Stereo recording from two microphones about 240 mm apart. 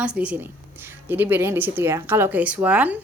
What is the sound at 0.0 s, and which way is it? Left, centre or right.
A woman's voice, centre.